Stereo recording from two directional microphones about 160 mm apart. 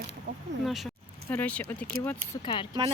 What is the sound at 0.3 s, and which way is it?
Speech, 90° right.